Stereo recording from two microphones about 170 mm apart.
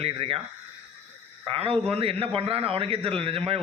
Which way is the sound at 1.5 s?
35° right (ahead or behind).